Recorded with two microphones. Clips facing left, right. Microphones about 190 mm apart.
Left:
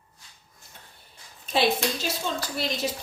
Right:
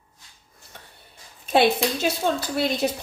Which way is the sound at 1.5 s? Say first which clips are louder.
Right 5 dB; 60° right (ahead or behind).